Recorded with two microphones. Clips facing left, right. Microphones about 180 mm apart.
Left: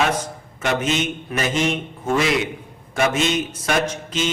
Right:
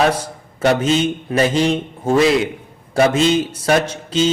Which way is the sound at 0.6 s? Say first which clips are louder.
Right 6 dB; 35° right (ahead or behind).